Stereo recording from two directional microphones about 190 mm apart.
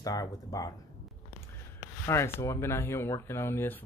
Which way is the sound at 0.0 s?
20° left (ahead or behind).